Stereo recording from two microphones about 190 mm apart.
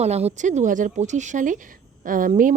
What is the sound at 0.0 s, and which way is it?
Speech, 35° right (ahead or behind).